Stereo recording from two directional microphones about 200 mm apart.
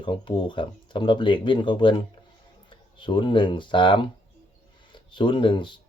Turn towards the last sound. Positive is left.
turn(degrees=25)  # may be behind; listen again after turning